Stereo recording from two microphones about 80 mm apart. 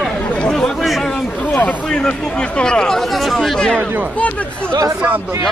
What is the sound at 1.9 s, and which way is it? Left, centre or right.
Speech, centre.